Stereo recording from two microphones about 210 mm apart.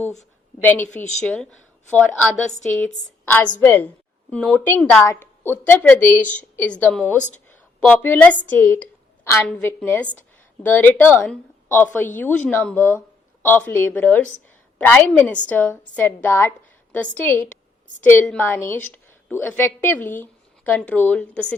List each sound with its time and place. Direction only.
0.2 s a woman's voice: 10° left (ahead or behind)
11.9 s a woman's voice: 35° left (ahead or behind)
12.5 s a woman's voice: 10° left (ahead or behind)